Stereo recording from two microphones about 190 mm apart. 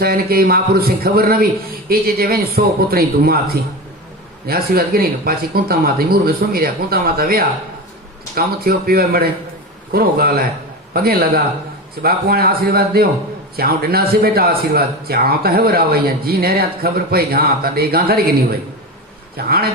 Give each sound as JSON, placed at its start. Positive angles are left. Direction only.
{"t": 0.0, "sound": "speech", "side_deg": -55}
{"t": 19.4, "sound": "speech", "side_deg": -55}